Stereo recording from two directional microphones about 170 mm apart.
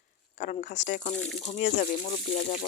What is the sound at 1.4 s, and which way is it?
Speech, 45° left (ahead or behind).